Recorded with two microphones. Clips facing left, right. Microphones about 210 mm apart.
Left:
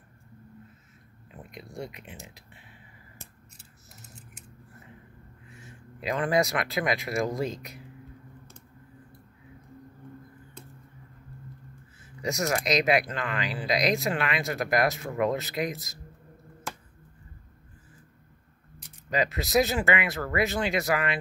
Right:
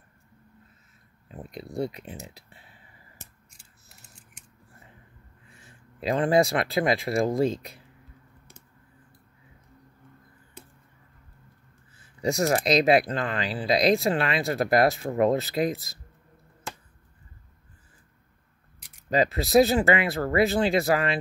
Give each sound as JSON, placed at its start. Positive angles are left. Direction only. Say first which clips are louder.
{"t": 1.3, "sound": "speech", "louder": "right 7 dB", "side_deg": -35}
{"t": 5.7, "sound": "speech", "louder": "right 4 dB", "side_deg": -30}
{"t": 12.2, "sound": "speech", "louder": "right 5 dB", "side_deg": -30}
{"t": 19.0, "sound": "speech", "louder": "right 4 dB", "side_deg": -35}